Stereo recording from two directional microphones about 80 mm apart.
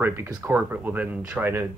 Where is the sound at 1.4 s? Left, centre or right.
Right.